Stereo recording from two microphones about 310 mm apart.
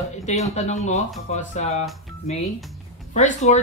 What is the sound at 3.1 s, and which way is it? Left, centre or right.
Speech, left.